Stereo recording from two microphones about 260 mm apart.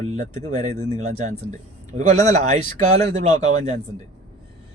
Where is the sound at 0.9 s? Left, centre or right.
Right.